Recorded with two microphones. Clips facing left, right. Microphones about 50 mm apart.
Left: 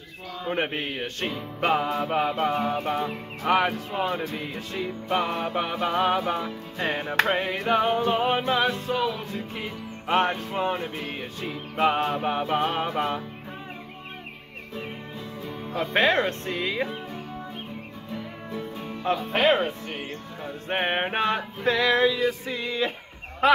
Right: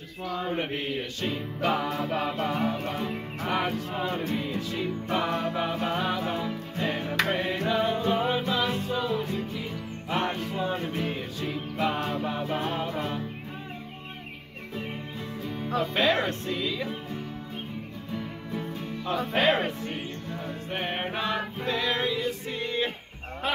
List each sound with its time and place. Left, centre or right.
0.5 s music: left
4.0 s music: left
12.1 s music: left
15.8 s music: left
19.3 s music: left
20.6 s music: left
21.6 s male singing: left
23.4 s speech: left